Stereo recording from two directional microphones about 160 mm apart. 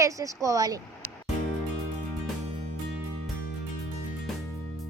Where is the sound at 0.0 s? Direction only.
20° right (ahead or behind).